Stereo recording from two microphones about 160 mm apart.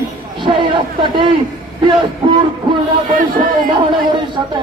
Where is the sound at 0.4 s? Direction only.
30° right (ahead or behind).